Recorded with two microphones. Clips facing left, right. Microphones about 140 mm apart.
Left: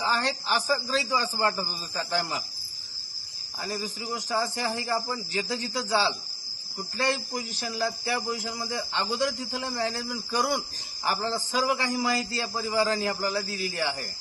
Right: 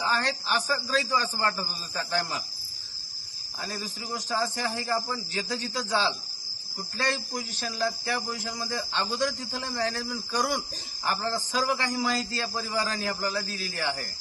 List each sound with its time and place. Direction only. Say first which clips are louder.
0.0 s a man's voice: left 1 dB; 15° left (ahead or behind)
4.3 s a man's voice: left 1 dB; 15° left (ahead or behind)
7.5 s a man's voice: right 1 dB; 20° left (ahead or behind)